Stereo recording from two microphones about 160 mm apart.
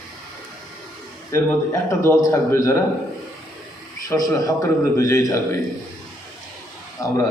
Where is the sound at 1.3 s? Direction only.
15° left (ahead or behind).